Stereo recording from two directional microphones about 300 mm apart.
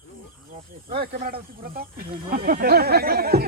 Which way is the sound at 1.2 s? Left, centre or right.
Right.